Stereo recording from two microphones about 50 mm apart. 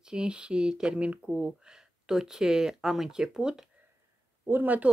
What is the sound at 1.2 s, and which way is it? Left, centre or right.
Speech, centre.